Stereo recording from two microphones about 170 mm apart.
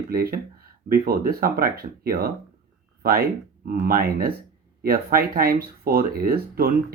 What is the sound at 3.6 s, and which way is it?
Speech, 60° right (ahead or behind).